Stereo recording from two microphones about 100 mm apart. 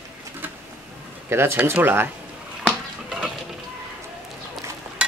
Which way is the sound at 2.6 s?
10° right (ahead or behind).